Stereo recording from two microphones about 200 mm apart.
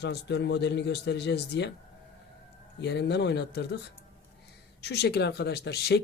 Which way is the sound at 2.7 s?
60° left (ahead or behind).